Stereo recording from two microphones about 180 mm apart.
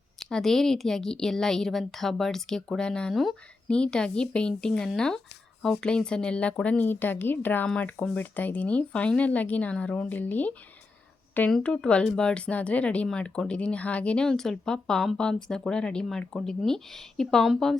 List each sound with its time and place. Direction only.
0.2 s speech: 5° left (ahead or behind)